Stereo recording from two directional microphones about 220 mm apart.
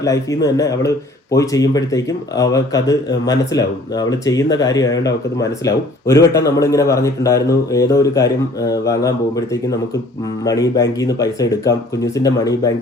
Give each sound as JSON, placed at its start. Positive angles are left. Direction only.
{"t": 0.0, "sound": "speech", "side_deg": 15}